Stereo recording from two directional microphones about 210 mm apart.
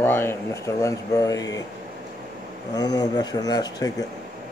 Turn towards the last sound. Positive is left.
turn(degrees=15)  # may be behind; listen again after turning